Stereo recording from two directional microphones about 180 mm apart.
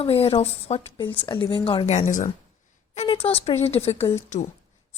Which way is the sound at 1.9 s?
40° left (ahead or behind).